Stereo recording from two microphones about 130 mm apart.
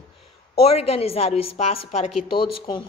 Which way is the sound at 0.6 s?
50° left (ahead or behind).